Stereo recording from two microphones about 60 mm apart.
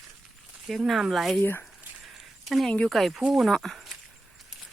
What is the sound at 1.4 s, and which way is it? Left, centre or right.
Speech, left.